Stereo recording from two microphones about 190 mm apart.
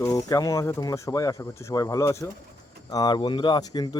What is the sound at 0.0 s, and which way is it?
Speech, 20° left (ahead or behind).